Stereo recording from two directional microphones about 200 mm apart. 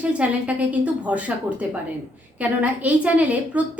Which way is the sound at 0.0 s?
5° right (ahead or behind).